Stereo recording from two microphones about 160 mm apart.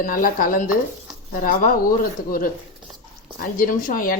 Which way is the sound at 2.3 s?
60° left (ahead or behind).